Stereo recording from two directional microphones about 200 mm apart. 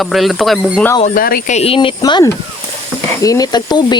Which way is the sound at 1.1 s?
45° left (ahead or behind).